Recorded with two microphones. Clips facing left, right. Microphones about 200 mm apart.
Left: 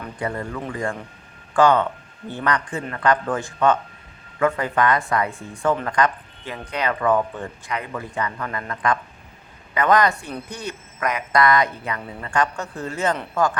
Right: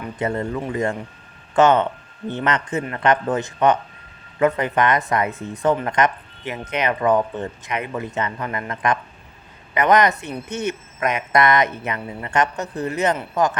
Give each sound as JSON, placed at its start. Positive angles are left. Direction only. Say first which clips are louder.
{"t": 0.2, "sound": "speech", "louder": "right 4 dB", "side_deg": -25}